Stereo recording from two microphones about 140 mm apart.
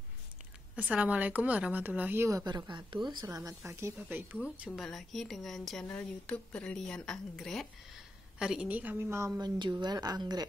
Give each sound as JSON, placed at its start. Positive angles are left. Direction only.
{"t": 0.7, "sound": "a woman's voice", "side_deg": -10}
{"t": 3.3, "sound": "speech", "side_deg": -20}
{"t": 4.6, "sound": "a woman's voice", "side_deg": 0}
{"t": 9.4, "sound": "speech", "side_deg": -30}